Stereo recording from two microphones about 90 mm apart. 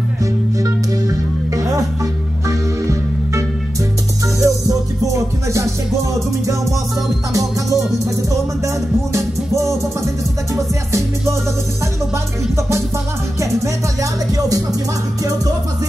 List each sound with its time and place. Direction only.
0.2 s music: 35° right (ahead or behind)
7.3 s music: 40° right (ahead or behind)